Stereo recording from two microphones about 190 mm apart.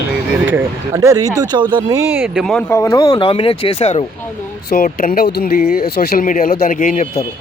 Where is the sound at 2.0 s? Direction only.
10° right (ahead or behind).